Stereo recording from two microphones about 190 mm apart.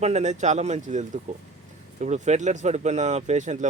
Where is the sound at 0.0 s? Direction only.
35° right (ahead or behind).